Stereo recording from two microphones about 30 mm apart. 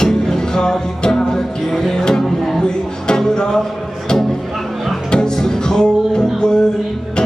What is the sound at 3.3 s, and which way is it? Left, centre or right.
Music, left.